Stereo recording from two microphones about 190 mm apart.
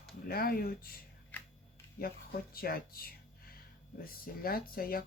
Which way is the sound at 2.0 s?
50° left (ahead or behind).